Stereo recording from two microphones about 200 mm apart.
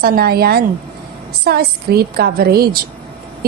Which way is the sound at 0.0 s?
50° right (ahead or behind).